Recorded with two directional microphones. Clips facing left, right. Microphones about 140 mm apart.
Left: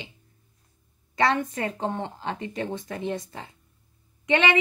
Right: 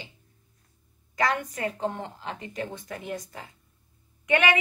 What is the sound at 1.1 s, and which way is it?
A woman's voice, 25° left (ahead or behind).